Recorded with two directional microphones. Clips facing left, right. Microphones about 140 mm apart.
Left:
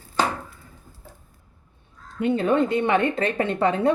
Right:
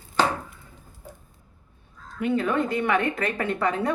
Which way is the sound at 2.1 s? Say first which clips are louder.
Left 3 dB; 25° left (ahead or behind).